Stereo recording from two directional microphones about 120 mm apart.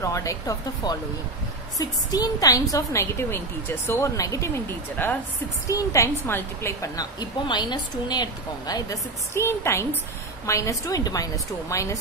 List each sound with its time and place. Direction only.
0.0 s a woman's voice: 25° left (ahead or behind)
5.0 s a woman's voice: 15° left (ahead or behind)
5.7 s a woman's voice: 25° left (ahead or behind)
9.3 s a woman's voice: 20° left (ahead or behind)